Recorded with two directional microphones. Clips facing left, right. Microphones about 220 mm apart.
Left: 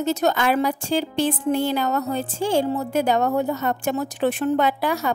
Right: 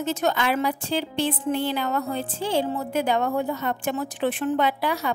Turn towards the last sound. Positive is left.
turn(degrees=45)  # may be behind; listen again after turning